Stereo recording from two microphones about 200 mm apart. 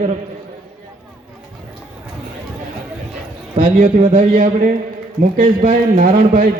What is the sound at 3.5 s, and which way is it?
A man's voice, 40° right (ahead or behind).